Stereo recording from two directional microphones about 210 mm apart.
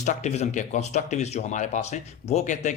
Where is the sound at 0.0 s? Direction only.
35° left (ahead or behind).